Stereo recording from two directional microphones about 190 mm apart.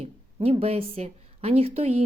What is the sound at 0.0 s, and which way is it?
Speech, 30° right (ahead or behind).